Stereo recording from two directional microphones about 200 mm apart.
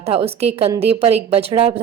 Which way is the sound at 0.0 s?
30° right (ahead or behind).